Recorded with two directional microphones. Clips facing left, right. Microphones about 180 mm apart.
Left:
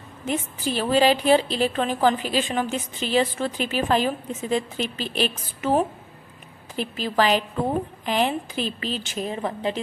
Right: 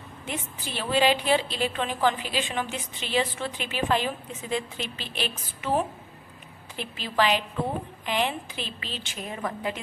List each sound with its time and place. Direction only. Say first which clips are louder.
0.2 s a woman's voice: left 9 dB; 40° left (ahead or behind)
9.3 s a woman's voice: left 3 dB; 30° left (ahead or behind)